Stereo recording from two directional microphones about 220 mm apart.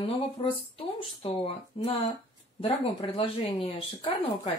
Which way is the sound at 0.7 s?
25° left (ahead or behind).